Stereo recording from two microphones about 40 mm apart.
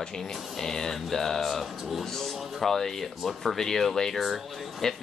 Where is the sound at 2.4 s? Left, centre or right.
Centre.